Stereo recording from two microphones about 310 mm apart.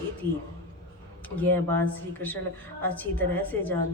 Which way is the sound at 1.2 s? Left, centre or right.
Centre.